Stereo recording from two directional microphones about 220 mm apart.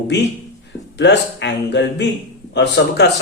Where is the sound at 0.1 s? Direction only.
50° left (ahead or behind).